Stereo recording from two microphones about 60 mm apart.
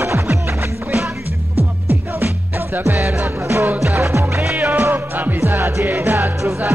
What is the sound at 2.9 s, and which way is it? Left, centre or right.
Music, right.